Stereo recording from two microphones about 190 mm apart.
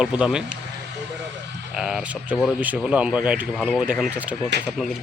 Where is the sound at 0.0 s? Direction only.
5° right (ahead or behind).